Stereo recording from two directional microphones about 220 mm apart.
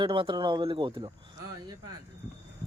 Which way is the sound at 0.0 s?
20° right (ahead or behind).